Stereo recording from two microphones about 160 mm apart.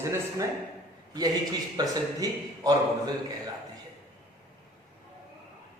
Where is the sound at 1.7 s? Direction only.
20° right (ahead or behind).